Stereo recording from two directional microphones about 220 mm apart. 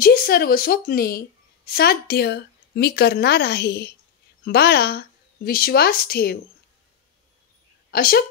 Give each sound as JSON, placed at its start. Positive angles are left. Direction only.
{"t": 0.0, "sound": "a woman's voice", "side_deg": 40}
{"t": 7.9, "sound": "a woman's voice", "side_deg": 40}